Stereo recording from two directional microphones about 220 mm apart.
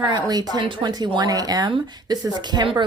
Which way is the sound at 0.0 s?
20° right (ahead or behind).